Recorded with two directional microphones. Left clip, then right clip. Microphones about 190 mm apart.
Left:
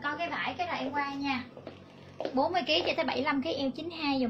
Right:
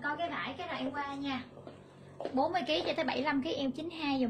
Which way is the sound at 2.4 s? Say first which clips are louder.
Left 3 dB; 15° right (ahead or behind).